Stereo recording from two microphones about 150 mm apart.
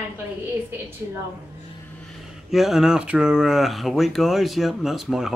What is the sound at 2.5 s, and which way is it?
Speech, centre (ahead or behind).